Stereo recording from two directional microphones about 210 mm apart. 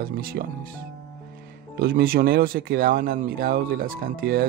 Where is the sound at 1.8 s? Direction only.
45° right (ahead or behind).